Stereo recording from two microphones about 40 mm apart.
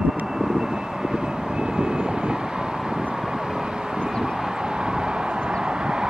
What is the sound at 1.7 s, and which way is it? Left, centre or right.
Vehicle, centre.